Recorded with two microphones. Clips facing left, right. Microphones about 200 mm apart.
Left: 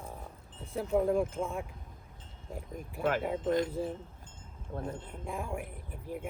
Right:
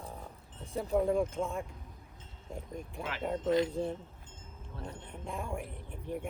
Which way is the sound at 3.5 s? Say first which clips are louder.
Right 2 dB; 50° left (ahead or behind).